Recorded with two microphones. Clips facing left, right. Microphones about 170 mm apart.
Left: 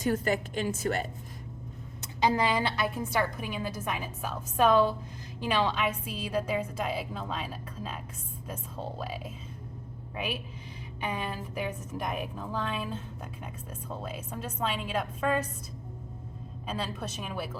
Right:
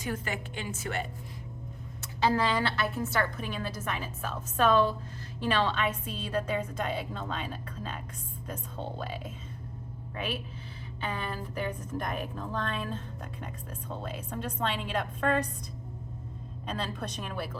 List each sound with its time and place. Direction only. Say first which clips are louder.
0.0 s a woman's voice: left 7 dB; 40° left (ahead or behind)
2.0 s a woman's voice: left 1 dB; 15° left (ahead or behind)
11.0 s a woman's voice: left 1 dB; 10° left (ahead or behind)
14.0 s a woman's voice: right 3 dB; 5° left (ahead or behind)
16.6 s a woman's voice: even; 5° left (ahead or behind)